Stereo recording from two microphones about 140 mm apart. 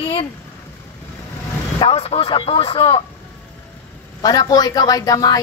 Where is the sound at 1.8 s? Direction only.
45° left (ahead or behind).